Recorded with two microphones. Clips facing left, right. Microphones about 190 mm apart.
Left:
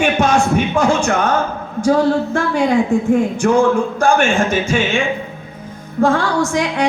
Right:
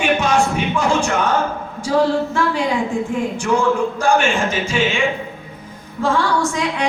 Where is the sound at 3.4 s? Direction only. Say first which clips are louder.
Left 3 dB; 50° left (ahead or behind).